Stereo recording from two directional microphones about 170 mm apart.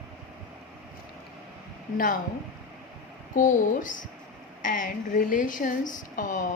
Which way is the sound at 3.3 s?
50° left (ahead or behind).